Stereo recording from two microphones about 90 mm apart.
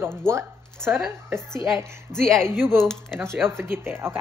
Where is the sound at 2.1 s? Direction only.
5° left (ahead or behind).